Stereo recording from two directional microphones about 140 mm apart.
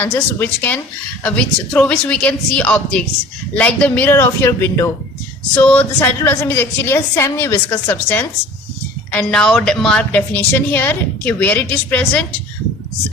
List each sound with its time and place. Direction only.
0.0 s a woman's voice: 15° left (ahead or behind)